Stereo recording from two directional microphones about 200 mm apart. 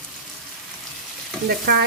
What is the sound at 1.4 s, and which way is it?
Stir, 55° right (ahead or behind).